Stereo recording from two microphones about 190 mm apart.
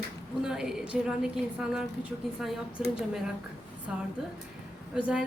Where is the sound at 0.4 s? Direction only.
5° right (ahead or behind).